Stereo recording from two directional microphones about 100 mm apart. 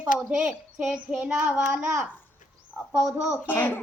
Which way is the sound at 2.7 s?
20° right (ahead or behind).